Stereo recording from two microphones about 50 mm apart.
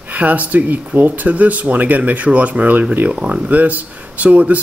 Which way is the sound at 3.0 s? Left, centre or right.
Right.